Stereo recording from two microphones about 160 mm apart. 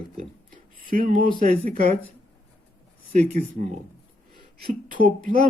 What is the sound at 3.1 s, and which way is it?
Speech, 45° right (ahead or behind).